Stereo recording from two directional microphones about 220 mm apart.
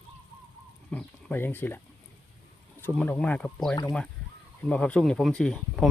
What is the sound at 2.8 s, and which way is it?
Speech, 5° left (ahead or behind).